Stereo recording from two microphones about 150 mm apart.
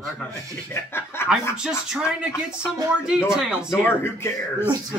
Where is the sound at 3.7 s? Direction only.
15° left (ahead or behind).